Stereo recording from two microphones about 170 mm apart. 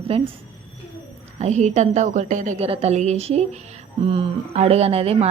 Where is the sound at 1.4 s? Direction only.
45° right (ahead or behind).